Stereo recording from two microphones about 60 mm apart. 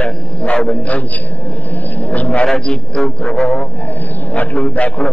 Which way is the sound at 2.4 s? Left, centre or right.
Centre.